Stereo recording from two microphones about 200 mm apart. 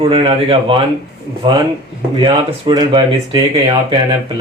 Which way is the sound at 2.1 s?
25° right (ahead or behind).